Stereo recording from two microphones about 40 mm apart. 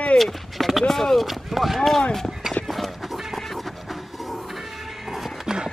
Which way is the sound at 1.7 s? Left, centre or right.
Centre.